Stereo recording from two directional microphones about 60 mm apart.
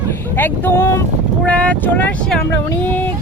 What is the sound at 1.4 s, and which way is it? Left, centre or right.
Speech, left.